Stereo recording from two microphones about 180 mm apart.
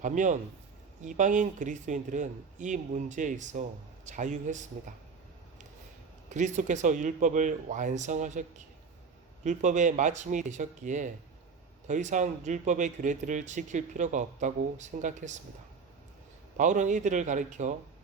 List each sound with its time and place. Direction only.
0.0 s a man's voice: 45° right (ahead or behind)
6.3 s a man's voice: 45° right (ahead or behind)
16.6 s a man's voice: 45° right (ahead or behind)